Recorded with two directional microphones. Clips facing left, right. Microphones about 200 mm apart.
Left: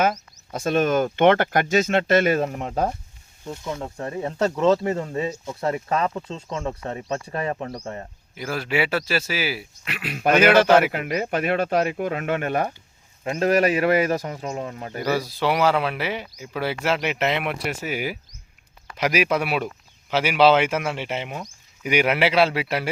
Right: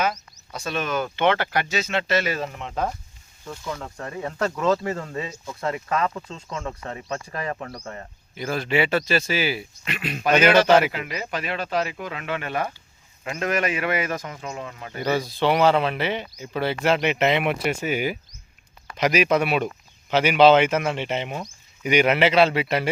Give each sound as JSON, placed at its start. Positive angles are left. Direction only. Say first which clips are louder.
{"t": 0.0, "sound": "speech", "louder": "left 3 dB", "side_deg": 50}
{"t": 3.4, "sound": "speech", "louder": "left 2 dB", "side_deg": 20}
{"t": 8.4, "sound": "speech", "louder": "right 1 dB", "side_deg": 5}
{"t": 10.8, "sound": "speech", "louder": "left 4 dB", "side_deg": 50}
{"t": 13.2, "sound": "speech", "louder": "left 5 dB", "side_deg": 35}
{"t": 15.1, "sound": "speech", "louder": "right 1 dB", "side_deg": 5}